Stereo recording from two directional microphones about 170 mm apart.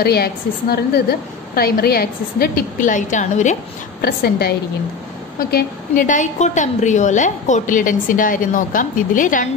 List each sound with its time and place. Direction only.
0.0 s a woman's voice: 65° left (ahead or behind); by 3.5 s 45° left (ahead or behind)
4.0 s a woman's voice: 65° left (ahead or behind)
5.5 s a woman's voice: 55° left (ahead or behind)